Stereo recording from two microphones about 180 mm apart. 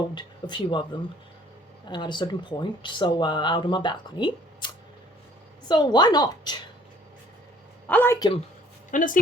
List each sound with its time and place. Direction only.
0.1 s speech: 25° left (ahead or behind)
1.9 s speech: 25° left (ahead or behind)
7.9 s a sound: 10° left (ahead or behind)
8.9 s speech: 45° left (ahead or behind)